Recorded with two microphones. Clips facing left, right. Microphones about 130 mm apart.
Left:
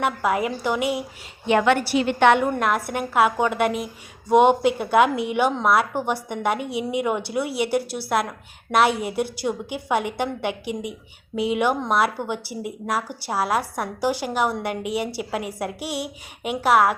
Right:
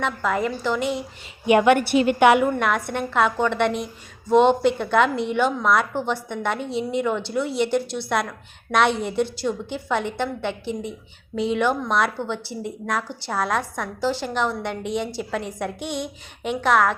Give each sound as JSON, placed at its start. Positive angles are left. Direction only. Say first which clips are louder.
{"t": 0.0, "sound": "a woman's voice", "louder": "left 1 dB", "side_deg": 10}
{"t": 1.5, "sound": "a woman's voice", "louder": "right 3 dB", "side_deg": -15}